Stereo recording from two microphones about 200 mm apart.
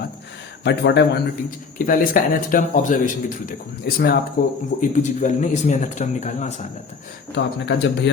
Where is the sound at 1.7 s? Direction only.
45° left (ahead or behind).